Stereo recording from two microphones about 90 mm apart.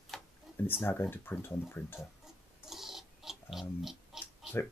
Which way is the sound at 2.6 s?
5° right (ahead or behind).